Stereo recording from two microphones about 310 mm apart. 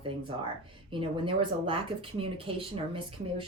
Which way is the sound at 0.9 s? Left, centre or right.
Centre.